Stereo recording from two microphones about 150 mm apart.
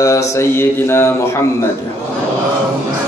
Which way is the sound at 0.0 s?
20° left (ahead or behind).